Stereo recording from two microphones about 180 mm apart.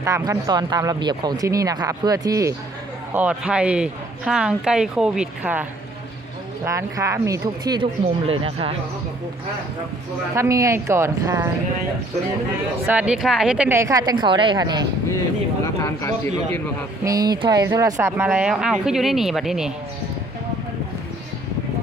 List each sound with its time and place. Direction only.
0.0 s speech: 20° right (ahead or behind)
3.2 s a woman's voice: 5° right (ahead or behind)
6.7 s speech: 15° right (ahead or behind)
10.3 s speech: 15° right (ahead or behind)
12.8 s speech: 5° right (ahead or behind); by 14.8 s 25° right (ahead or behind)
15.6 s speech: 15° left (ahead or behind)
17.0 s speech: 20° right (ahead or behind); by 19.7 s centre (ahead or behind)